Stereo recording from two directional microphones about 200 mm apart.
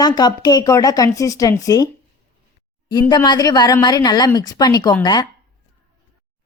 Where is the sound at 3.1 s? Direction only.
20° left (ahead or behind).